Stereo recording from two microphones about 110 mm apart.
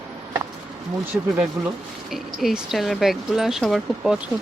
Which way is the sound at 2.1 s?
Centre (ahead or behind).